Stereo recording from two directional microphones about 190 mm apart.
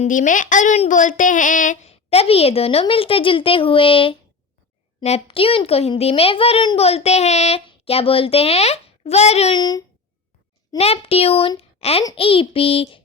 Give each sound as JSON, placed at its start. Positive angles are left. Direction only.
{"t": 0.0, "sound": "a child's voice", "side_deg": 40}
{"t": 9.6, "sound": "child singing", "side_deg": 20}
{"t": 10.8, "sound": "a child's voice", "side_deg": 30}
{"t": 12.0, "sound": "child singing", "side_deg": 30}